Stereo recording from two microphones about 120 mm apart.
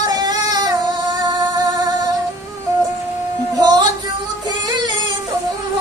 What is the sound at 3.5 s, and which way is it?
Music, 35° right (ahead or behind).